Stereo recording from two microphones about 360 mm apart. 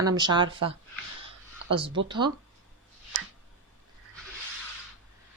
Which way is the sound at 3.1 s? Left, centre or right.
Right.